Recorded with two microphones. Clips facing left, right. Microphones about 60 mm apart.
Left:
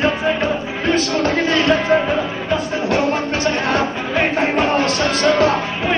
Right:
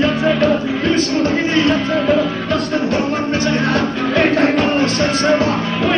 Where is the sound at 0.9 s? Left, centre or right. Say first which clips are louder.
Even; right.